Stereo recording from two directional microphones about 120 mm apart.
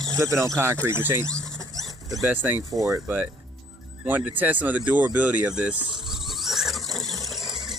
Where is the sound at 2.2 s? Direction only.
15° right (ahead or behind).